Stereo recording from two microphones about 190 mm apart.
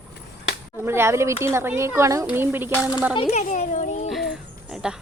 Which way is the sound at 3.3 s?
40° left (ahead or behind).